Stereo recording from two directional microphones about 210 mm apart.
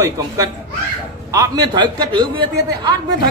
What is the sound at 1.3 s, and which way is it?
A man's voice, 15° right (ahead or behind).